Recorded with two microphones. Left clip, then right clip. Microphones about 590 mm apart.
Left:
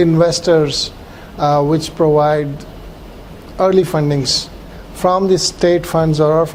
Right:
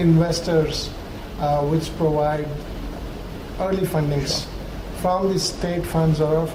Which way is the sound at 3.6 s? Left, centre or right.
Left.